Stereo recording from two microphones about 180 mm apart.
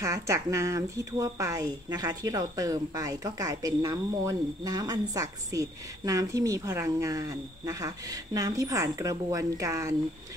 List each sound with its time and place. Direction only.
0.0 s speech: 15° right (ahead or behind)